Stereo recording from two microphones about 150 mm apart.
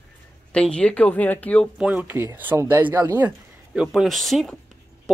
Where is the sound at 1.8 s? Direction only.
10° right (ahead or behind).